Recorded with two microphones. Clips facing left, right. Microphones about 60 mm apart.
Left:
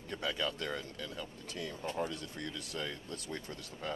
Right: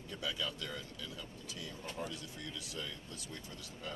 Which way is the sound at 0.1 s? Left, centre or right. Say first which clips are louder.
Left 4 dB; left.